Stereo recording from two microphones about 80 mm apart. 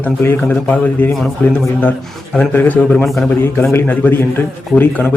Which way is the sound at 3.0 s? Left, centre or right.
Centre.